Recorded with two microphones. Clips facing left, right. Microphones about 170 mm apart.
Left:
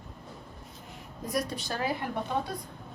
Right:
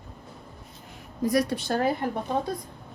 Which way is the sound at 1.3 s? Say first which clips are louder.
Right 8 dB; 70° right (ahead or behind).